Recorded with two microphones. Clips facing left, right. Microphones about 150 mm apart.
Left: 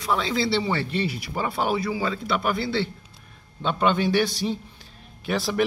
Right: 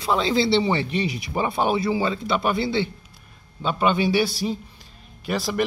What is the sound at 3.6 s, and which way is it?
Speech, 5° right (ahead or behind).